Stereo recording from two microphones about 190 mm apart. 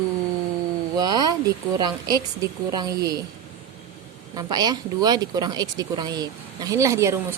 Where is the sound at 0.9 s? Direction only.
20° right (ahead or behind).